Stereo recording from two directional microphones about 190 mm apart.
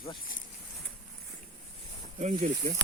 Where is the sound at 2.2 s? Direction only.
40° right (ahead or behind).